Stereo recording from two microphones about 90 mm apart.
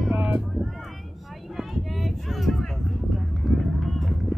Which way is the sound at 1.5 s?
Centre (ahead or behind).